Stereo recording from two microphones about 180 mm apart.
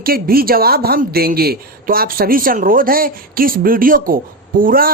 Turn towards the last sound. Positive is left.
turn(degrees=-50)  # may be behind; listen again after turning